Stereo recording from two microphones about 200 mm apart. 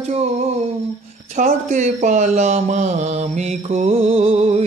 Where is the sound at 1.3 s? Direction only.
40° right (ahead or behind).